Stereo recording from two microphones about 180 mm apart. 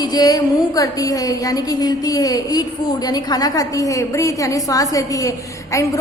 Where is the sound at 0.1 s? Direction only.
20° left (ahead or behind).